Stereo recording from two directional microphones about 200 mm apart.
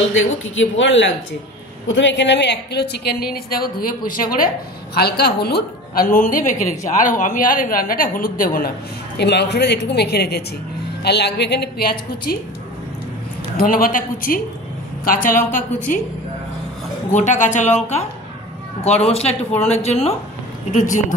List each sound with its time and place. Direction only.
0.1 s a woman's voice: 75° left (ahead or behind); by 8.7 s 45° left (ahead or behind)
9.2 s a woman's voice: 55° left (ahead or behind)
13.6 s a woman's voice: 45° left (ahead or behind)
17.1 s a woman's voice: 35° left (ahead or behind)
19.0 s a woman's voice: 30° left (ahead or behind)